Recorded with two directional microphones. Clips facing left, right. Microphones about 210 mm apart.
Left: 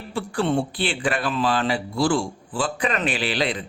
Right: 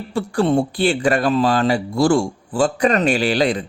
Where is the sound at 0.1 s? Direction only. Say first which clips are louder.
Right 5 dB; 40° right (ahead or behind).